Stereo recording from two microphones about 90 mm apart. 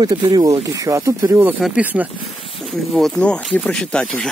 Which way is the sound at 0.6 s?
40° right (ahead or behind).